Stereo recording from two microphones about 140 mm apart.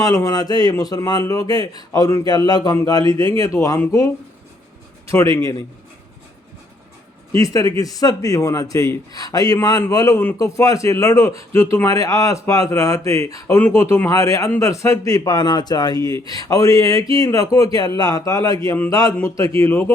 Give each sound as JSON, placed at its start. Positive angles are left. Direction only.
{"t": 0.0, "sound": "a man's voice", "side_deg": 20}
{"t": 7.3, "sound": "a man's voice", "side_deg": 25}